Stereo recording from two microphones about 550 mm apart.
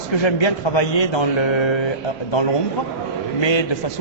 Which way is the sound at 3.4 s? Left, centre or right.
Left.